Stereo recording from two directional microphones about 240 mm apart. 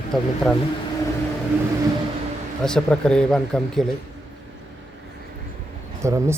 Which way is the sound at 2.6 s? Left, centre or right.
Centre.